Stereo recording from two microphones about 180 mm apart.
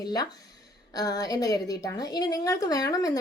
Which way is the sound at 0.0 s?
20° left (ahead or behind).